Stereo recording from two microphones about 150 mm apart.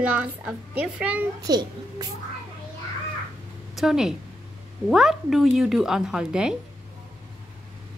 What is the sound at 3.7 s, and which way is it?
A woman's voice, 5° right (ahead or behind).